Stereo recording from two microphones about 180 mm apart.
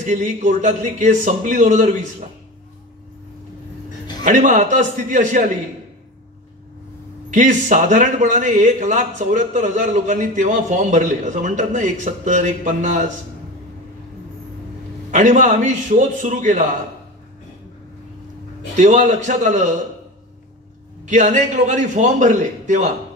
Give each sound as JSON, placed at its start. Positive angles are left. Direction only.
{"t": 0.0, "sound": "speech", "side_deg": -45}
{"t": 4.2, "sound": "speech", "side_deg": -45}
{"t": 7.3, "sound": "speech", "side_deg": -45}
{"t": 15.0, "sound": "speech", "side_deg": -45}
{"t": 18.8, "sound": "a man's voice", "side_deg": -40}
{"t": 21.1, "sound": "speech", "side_deg": -40}